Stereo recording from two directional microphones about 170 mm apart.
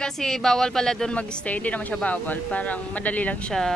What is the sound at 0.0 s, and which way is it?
Speech, 5° left (ahead or behind).